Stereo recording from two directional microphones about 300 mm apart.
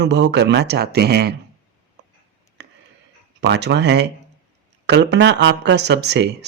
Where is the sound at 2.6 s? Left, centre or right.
Right.